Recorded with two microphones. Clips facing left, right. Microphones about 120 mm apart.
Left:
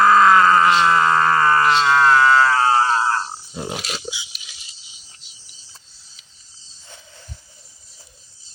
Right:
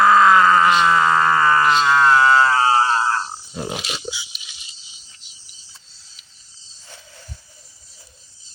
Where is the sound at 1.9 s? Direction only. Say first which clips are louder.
Even; 20° right (ahead or behind).